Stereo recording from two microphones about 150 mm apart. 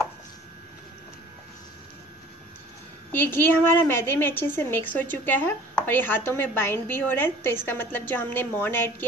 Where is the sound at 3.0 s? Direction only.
15° left (ahead or behind).